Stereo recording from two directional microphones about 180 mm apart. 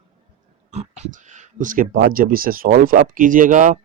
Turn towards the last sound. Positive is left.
turn(degrees=-45)  # may be behind; listen again after turning